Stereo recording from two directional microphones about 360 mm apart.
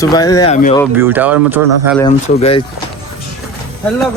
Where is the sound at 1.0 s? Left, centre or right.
Centre.